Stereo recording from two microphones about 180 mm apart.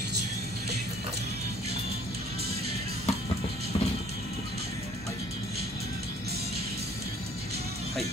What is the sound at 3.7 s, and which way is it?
Music, 25° left (ahead or behind).